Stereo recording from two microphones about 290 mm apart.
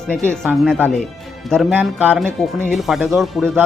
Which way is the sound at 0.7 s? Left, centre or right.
Centre.